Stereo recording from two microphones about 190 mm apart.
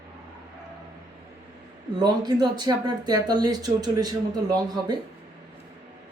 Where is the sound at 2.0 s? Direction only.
20° right (ahead or behind).